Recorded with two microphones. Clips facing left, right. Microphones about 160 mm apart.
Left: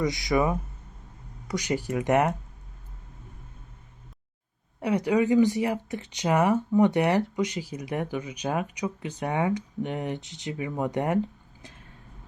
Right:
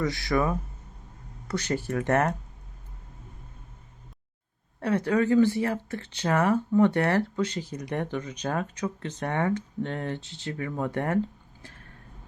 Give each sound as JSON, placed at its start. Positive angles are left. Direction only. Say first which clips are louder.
{"t": 0.0, "sound": "speech", "louder": "left 1 dB", "side_deg": 20}
{"t": 4.8, "sound": "speech", "louder": "left 1 dB", "side_deg": 15}